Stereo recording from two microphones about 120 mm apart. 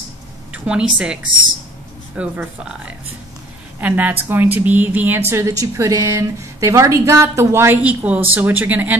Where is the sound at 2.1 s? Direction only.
10° right (ahead or behind).